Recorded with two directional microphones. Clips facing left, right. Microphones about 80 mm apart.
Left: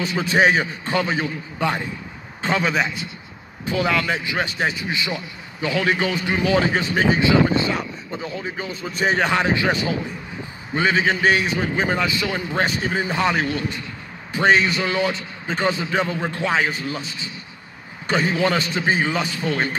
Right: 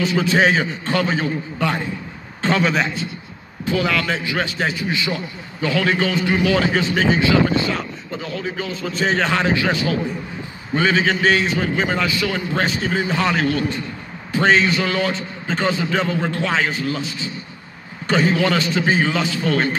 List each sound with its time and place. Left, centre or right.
0.1 s a man's voice: centre
2.4 s a man's voice: centre
3.6 s a man's voice: left
18.0 s a man's voice: centre